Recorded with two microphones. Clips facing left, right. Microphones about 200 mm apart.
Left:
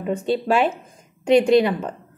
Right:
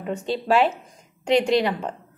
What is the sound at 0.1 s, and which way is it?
A woman's voice, 55° left (ahead or behind).